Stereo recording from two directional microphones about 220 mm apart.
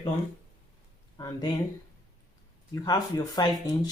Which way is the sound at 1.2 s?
15° left (ahead or behind).